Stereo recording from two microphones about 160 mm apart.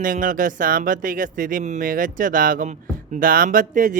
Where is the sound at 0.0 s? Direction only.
55° right (ahead or behind).